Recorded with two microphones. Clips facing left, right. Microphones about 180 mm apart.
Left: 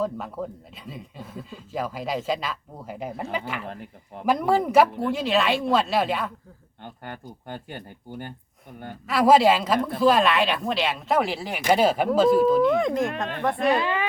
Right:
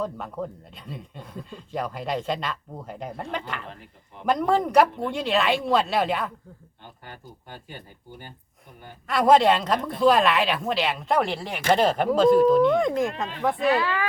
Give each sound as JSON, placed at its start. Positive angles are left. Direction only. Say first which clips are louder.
{"t": 0.0, "sound": "speech", "louder": "left 2 dB", "side_deg": 5}
{"t": 3.7, "sound": "speech", "louder": "left 6 dB", "side_deg": 50}
{"t": 4.3, "sound": "speech", "louder": "left 1 dB", "side_deg": 5}
{"t": 6.8, "sound": "speech", "louder": "left 6 dB", "side_deg": 60}
{"t": 9.0, "sound": "speech", "louder": "left 1 dB", "side_deg": 5}
{"t": 13.7, "sound": "speech", "louder": "even", "side_deg": 20}